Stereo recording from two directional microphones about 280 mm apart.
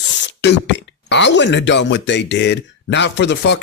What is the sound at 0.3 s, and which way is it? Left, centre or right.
Speech, left.